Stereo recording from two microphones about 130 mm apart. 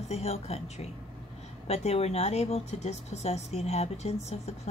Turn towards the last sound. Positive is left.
turn(degrees=55)  # may be behind; listen again after turning